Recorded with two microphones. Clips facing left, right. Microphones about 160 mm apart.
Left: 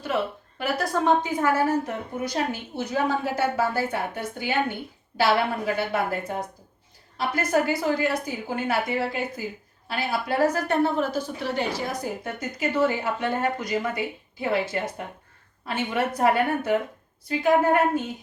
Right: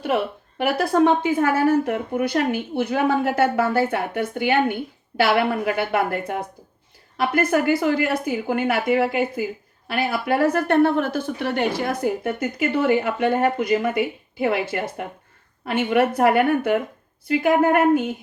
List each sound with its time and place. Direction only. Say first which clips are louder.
0.6 s speech: right 7 dB; 60° right (ahead or behind)